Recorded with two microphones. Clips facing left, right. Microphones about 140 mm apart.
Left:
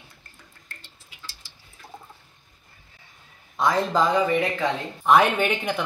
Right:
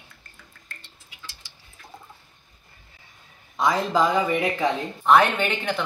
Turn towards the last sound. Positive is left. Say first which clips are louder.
# left 1 dB
turn(degrees=10)  # may be behind; listen again after turning